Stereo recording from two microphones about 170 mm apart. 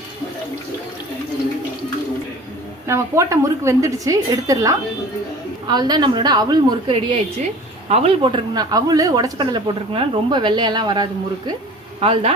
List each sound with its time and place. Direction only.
2.8 s speech: 15° right (ahead or behind)
11.9 s speech: 35° right (ahead or behind)